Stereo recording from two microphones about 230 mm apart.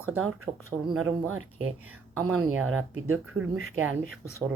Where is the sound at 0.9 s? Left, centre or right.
Centre.